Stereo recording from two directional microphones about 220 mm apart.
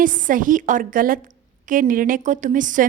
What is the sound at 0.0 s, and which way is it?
A woman's voice, 35° right (ahead or behind).